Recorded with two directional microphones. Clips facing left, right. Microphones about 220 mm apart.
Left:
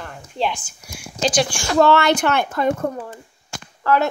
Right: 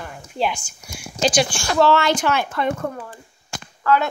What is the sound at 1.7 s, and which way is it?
Speech, 55° left (ahead or behind).